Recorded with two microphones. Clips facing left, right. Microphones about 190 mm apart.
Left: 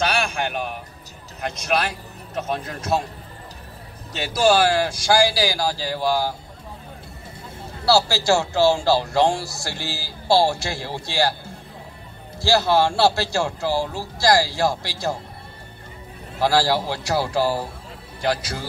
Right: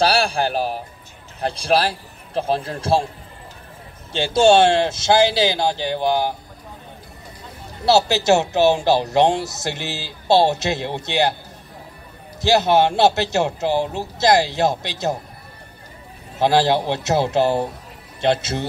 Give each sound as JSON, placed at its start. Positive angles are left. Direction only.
{"t": 0.0, "sound": "a sound", "side_deg": -35}
{"t": 1.4, "sound": "a man's voice", "side_deg": -30}
{"t": 4.1, "sound": "a man's voice", "side_deg": -25}
{"t": 7.8, "sound": "a man's voice", "side_deg": -20}
{"t": 12.4, "sound": "a man's voice", "side_deg": -20}
{"t": 16.3, "sound": "a man's voice", "side_deg": -20}